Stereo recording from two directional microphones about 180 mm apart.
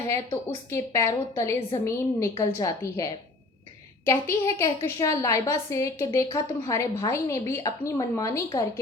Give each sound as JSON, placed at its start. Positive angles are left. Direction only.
{"t": 0.1, "sound": "a woman's voice", "side_deg": 15}